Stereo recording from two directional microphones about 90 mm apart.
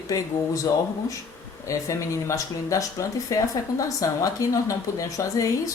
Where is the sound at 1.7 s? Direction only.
35° left (ahead or behind).